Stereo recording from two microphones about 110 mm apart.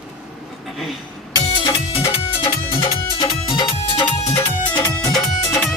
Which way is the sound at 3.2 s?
50° left (ahead or behind).